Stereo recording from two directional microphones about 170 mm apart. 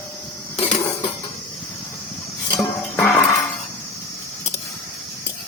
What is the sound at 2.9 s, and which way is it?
Music, 10° left (ahead or behind).